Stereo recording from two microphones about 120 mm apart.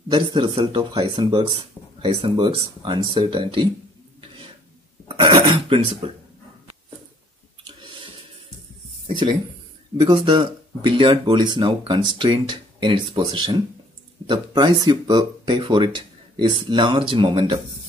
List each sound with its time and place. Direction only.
0.1 s speech: 40° right (ahead or behind)
5.0 s speech: 45° right (ahead or behind)
9.9 s speech: 40° right (ahead or behind)